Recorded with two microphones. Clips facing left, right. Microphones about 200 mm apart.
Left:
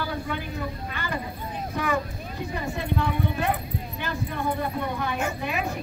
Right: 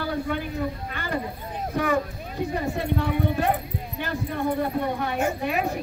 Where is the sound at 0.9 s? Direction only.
50° right (ahead or behind).